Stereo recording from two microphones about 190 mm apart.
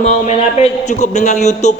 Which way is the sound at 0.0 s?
35° left (ahead or behind).